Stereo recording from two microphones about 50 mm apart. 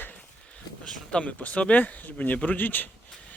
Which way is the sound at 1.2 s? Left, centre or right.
Left.